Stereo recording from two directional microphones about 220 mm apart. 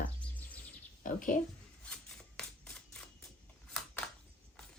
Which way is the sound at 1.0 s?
35° left (ahead or behind).